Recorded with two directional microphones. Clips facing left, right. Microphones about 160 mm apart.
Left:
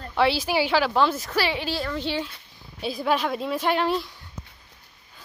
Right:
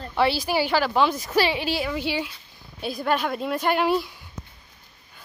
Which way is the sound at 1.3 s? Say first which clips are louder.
Right 3 dB; 15° right (ahead or behind).